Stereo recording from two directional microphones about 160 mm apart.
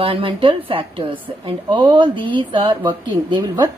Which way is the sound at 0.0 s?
35° right (ahead or behind).